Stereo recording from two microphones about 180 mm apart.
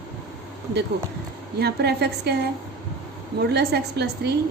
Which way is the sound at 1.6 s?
65° right (ahead or behind).